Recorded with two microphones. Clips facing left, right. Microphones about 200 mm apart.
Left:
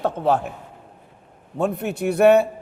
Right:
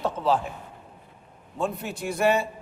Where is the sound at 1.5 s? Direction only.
65° left (ahead or behind).